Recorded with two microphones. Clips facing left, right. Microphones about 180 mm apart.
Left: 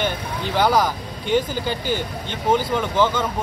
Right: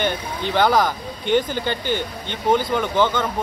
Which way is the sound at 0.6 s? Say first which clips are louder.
Right 1 dB; 10° left (ahead or behind).